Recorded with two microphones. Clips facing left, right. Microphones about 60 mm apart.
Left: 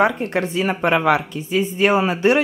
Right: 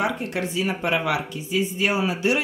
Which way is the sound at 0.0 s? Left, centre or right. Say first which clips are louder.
Left 7 dB; left.